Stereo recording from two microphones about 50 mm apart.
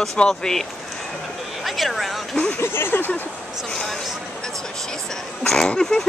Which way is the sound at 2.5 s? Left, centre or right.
Left.